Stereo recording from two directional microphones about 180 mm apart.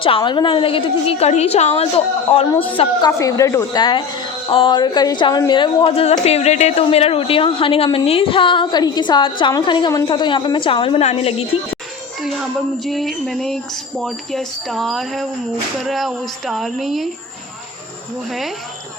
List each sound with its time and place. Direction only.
0.0 s a woman's voice: 25° left (ahead or behind)
3.1 s a woman's voice: 20° left (ahead or behind); by 11.4 s 35° left (ahead or behind)
12.8 s speech: centre (ahead or behind)